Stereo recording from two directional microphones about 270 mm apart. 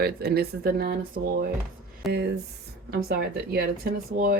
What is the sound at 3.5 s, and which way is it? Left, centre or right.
Speech, right.